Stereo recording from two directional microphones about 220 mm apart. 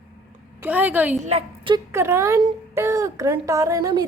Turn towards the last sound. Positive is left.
turn(degrees=-15)  # may be behind; listen again after turning